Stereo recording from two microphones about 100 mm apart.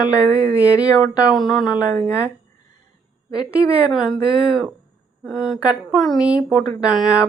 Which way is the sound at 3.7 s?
10° right (ahead or behind).